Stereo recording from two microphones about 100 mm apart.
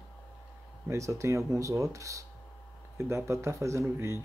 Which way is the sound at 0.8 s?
30° right (ahead or behind).